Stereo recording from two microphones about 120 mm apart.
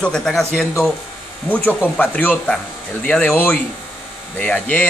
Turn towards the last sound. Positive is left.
turn(degrees=15)  # may be behind; listen again after turning